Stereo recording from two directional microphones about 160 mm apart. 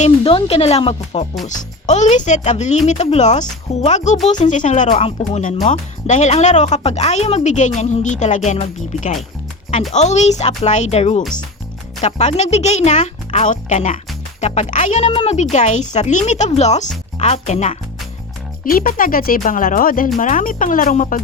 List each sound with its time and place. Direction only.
0.3 s speech: 35° left (ahead or behind)
1.5 s speech: 50° left (ahead or behind)
9.9 s speech: 45° left (ahead or behind)
18.6 s speech: 60° left (ahead or behind)